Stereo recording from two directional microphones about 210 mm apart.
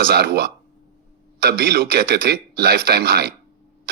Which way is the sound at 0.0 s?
50° right (ahead or behind).